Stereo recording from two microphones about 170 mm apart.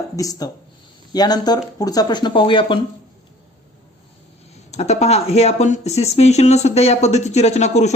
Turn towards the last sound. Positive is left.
turn(degrees=40)  # may be behind; listen again after turning